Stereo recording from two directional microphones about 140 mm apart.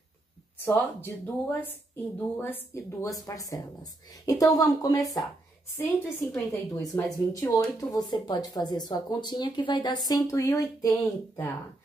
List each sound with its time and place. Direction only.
0.7 s speech: 15° left (ahead or behind)
5.8 s speech: 15° left (ahead or behind)